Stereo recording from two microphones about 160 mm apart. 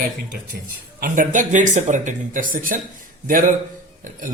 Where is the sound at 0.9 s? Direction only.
60° right (ahead or behind).